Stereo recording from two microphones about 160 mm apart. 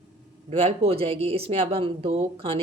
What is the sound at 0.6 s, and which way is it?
Speech, 35° right (ahead or behind).